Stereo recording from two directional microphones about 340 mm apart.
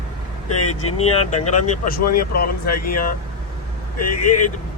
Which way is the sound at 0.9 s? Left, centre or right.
Centre.